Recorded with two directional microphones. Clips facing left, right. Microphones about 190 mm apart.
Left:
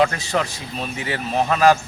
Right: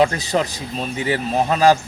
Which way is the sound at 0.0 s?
35° right (ahead or behind).